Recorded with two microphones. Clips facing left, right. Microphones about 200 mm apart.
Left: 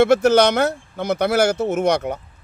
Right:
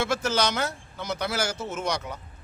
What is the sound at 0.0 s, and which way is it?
A man's voice, 60° left (ahead or behind).